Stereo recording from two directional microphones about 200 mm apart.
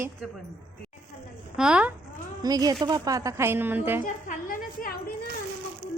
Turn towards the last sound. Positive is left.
turn(degrees=45)  # may be behind; listen again after turning